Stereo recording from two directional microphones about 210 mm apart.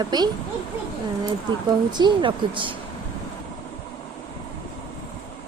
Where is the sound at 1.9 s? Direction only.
20° right (ahead or behind).